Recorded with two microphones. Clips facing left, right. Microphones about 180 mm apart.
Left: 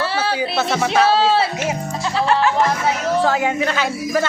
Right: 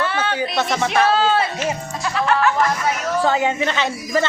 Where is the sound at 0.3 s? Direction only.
5° left (ahead or behind).